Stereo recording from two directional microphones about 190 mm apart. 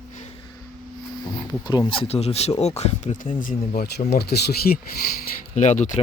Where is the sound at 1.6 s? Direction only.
20° left (ahead or behind); by 4.8 s 55° left (ahead or behind).